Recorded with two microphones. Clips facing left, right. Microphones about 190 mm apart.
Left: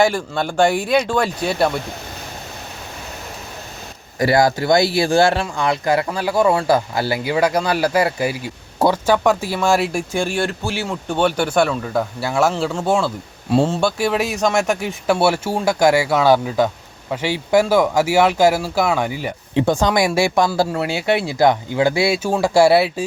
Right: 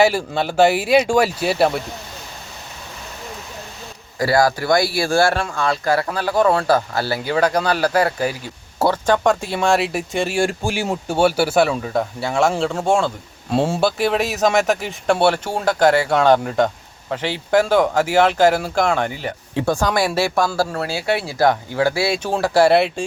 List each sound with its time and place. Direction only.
0.0 s speech: 5° right (ahead or behind)
4.2 s speech: 20° left (ahead or behind); by 13.1 s 5° left (ahead or behind)
13.6 s speech: 10° right (ahead or behind)
14.0 s speech: centre (ahead or behind)
19.5 s speech: 20° left (ahead or behind)